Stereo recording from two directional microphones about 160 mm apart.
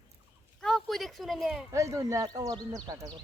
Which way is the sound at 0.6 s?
Centre (ahead or behind).